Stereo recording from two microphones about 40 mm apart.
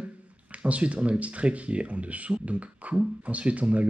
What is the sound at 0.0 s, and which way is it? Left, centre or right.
Speech, right.